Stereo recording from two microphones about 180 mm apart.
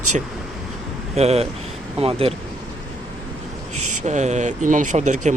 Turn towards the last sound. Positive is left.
turn(degrees=-40)  # may be behind; listen again after turning